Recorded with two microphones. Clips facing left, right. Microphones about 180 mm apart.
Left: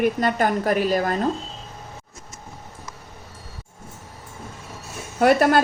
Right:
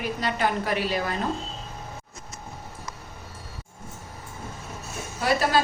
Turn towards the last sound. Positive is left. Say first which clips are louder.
# left 7 dB
turn(degrees=55)  # may be behind; listen again after turning